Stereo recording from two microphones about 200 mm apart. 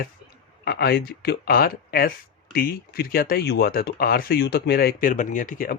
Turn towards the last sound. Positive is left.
turn(degrees=45)  # may be behind; listen again after turning